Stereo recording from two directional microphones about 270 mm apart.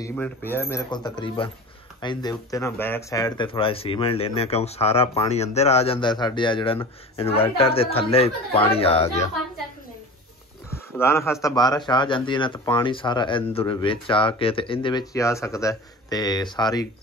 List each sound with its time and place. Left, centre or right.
0.0 s speech: centre
10.7 s speech: centre